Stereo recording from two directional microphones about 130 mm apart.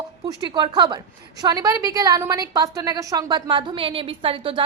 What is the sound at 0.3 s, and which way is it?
A woman's voice, 35° right (ahead or behind).